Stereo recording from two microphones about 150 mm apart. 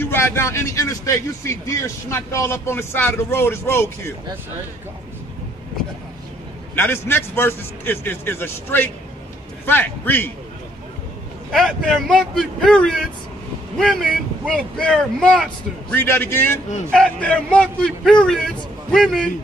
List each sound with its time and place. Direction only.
0.0 s speech: 15° left (ahead or behind)
6.7 s speech: 15° left (ahead or behind)
11.5 s a man's voice: centre (ahead or behind)